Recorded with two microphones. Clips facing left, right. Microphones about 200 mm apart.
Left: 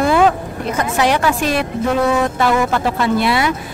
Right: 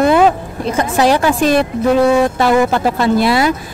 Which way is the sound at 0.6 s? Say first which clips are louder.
Right 4 dB; 35° right (ahead or behind).